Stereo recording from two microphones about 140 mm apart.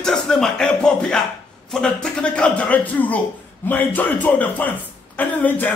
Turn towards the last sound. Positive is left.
turn(degrees=10)  # may be behind; listen again after turning